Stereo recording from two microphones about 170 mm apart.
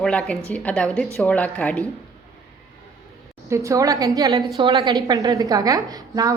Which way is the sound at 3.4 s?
15° right (ahead or behind).